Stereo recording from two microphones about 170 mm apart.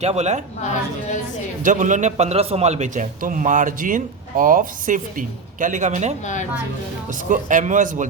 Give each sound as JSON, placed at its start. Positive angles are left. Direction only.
{"t": 0.0, "sound": "a woman's voice", "side_deg": -40}
{"t": 1.6, "sound": "a man's voice", "side_deg": -45}
{"t": 7.3, "sound": "a man's voice", "side_deg": -50}